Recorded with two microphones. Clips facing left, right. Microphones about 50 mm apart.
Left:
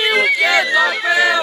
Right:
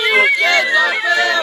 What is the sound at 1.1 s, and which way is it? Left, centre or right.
Music, centre.